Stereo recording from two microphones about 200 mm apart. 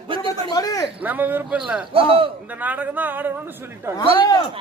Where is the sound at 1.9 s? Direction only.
25° right (ahead or behind).